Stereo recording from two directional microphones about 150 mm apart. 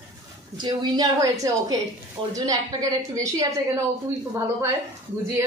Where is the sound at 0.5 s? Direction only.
25° right (ahead or behind).